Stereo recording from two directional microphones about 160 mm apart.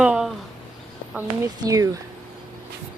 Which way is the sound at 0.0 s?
5° right (ahead or behind).